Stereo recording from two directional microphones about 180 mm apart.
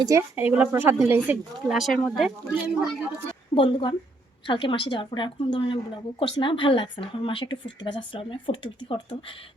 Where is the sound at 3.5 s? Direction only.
35° left (ahead or behind).